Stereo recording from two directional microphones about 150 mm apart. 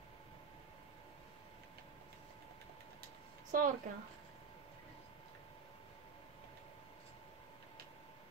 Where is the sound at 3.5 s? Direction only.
65° right (ahead or behind).